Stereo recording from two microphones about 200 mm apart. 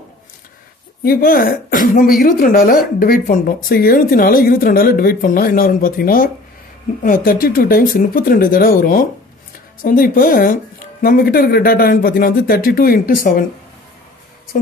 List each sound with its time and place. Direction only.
1.0 s speech: 45° left (ahead or behind)
14.5 s speech: 45° left (ahead or behind)